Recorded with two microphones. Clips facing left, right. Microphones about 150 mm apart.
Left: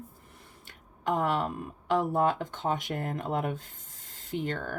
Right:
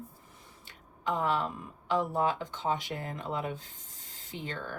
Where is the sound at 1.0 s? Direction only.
55° left (ahead or behind).